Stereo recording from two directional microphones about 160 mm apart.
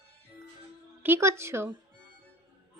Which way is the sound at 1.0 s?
15° right (ahead or behind).